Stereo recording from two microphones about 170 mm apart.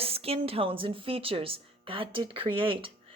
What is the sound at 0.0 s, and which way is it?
Speech, 35° right (ahead or behind).